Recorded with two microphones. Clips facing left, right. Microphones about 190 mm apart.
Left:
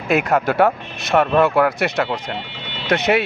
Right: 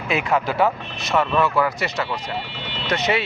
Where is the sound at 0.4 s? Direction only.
65° left (ahead or behind).